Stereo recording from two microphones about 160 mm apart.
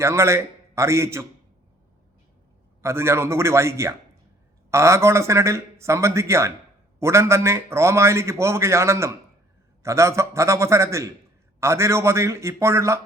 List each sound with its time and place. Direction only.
0.0 s a man's voice: 15° right (ahead or behind)
2.8 s a man's voice: 15° right (ahead or behind)